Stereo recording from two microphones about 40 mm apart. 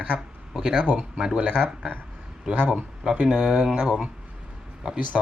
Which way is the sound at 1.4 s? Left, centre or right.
Right.